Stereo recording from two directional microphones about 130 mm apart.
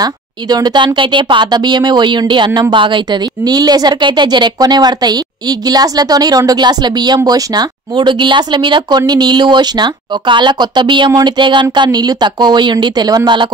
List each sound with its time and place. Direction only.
0.0 s a woman's voice: 30° right (ahead or behind)